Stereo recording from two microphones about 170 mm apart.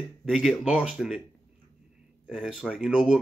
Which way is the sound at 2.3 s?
5° right (ahead or behind).